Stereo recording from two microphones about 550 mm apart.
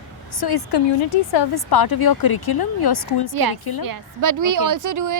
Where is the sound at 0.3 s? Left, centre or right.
Left.